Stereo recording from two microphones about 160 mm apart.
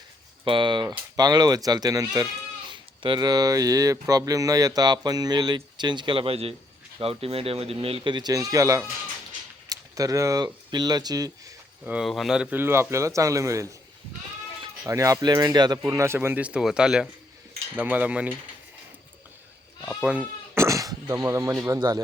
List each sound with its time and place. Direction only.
0.4 s speech: 30° right (ahead or behind)
11.9 s a man's voice: 5° right (ahead or behind)
19.8 s speech: centre (ahead or behind)
20.6 s a sound: 20° right (ahead or behind)
21.7 s speech: 25° right (ahead or behind)